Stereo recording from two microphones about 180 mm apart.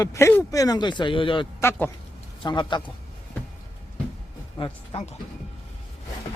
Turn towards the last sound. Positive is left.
turn(degrees=25)  # may be behind; listen again after turning